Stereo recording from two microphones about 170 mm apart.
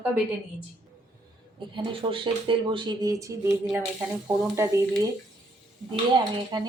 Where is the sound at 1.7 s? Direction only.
30° right (ahead or behind).